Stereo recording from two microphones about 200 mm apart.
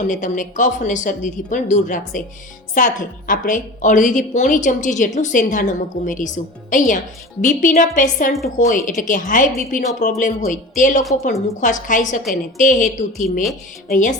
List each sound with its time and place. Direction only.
0.0 s a woman's voice: 40° left (ahead or behind)